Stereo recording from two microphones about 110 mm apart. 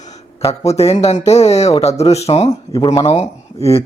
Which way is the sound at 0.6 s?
75° left (ahead or behind).